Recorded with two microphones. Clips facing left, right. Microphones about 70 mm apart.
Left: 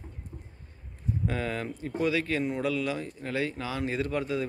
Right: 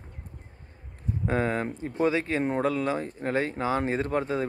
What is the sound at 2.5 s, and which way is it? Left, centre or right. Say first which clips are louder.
Speech: right 3 dB; right.